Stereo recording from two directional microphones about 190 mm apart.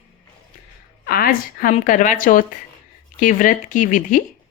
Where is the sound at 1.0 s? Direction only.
50° left (ahead or behind).